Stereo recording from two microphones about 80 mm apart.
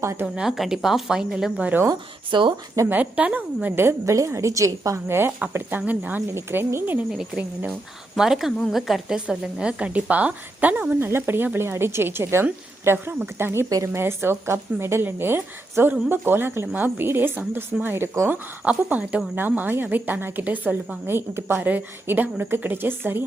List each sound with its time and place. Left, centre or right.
0.0 s a woman's voice: right
0.3 s speech: centre
2.3 s speech: right
2.9 s a woman's voice: centre; by 5.1 s right
5.5 s a woman's voice: right
7.2 s speech: centre
8.1 s a woman's voice: centre; by 13.7 s right
13.7 s a woman's voice: right
13.9 s a woman's voice: right
18.6 s a woman's voice: centre
21.1 s a woman's voice: right